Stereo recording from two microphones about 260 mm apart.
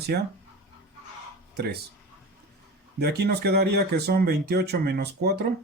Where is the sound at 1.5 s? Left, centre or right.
Right.